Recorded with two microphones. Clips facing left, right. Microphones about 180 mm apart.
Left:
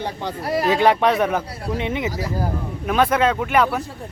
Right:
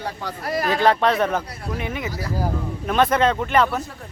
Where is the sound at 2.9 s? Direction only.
5° left (ahead or behind).